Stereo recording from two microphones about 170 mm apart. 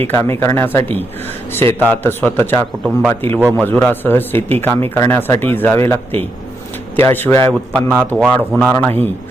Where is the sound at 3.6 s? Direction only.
10° left (ahead or behind).